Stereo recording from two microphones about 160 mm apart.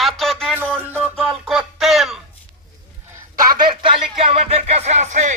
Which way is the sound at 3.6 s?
30° right (ahead or behind).